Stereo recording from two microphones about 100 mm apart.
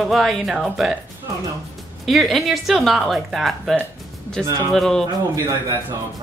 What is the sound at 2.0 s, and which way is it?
Speech, centre (ahead or behind).